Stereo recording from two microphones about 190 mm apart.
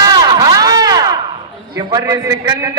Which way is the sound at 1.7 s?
20° right (ahead or behind).